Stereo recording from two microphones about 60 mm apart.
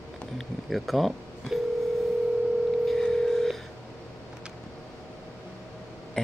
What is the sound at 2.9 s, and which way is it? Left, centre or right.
Telephone, centre.